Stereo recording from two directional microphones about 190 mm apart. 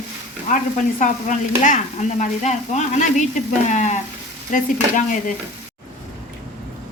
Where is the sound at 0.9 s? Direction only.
40° left (ahead or behind).